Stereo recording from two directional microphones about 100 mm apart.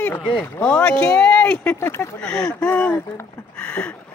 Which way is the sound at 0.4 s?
15° left (ahead or behind).